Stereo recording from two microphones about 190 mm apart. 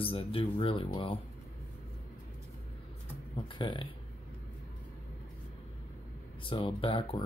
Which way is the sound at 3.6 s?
25° left (ahead or behind).